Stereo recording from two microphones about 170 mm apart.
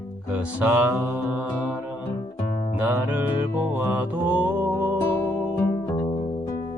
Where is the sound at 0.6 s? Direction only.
10° right (ahead or behind).